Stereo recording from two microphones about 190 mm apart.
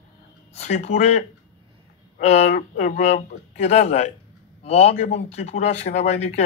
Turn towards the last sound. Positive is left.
turn(degrees=35)  # may be behind; listen again after turning